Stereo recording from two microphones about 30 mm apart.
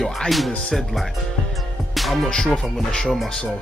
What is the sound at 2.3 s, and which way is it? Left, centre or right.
Speech, centre.